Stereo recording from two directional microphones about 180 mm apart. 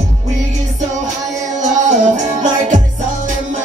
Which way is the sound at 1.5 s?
40° right (ahead or behind).